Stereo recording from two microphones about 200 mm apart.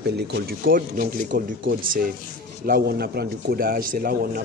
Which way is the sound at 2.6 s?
50° right (ahead or behind).